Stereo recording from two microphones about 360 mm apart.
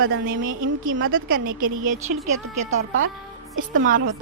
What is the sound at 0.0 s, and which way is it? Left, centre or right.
A woman's voice, right.